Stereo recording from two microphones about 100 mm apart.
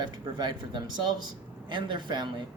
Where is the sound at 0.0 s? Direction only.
50° right (ahead or behind).